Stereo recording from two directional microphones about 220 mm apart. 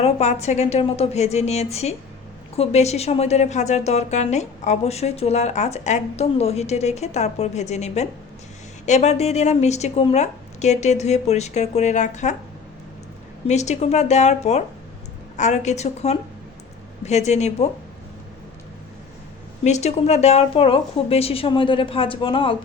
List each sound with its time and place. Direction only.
0.0 s a woman's voice: 30° left (ahead or behind)
13.5 s a woman's voice: 30° left (ahead or behind)
19.6 s a woman's voice: 30° left (ahead or behind)